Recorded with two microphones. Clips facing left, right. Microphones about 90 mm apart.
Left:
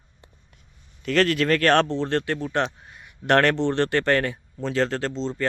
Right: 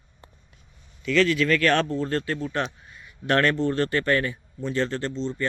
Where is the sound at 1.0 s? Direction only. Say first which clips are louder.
Even; 55° left (ahead or behind).